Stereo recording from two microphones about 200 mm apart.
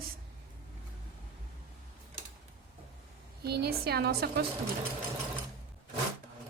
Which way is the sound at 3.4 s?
55° right (ahead or behind).